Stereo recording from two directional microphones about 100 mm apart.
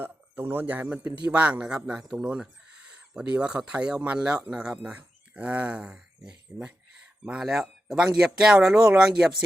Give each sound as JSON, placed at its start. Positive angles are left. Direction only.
{"t": 0.0, "sound": "speech", "side_deg": -20}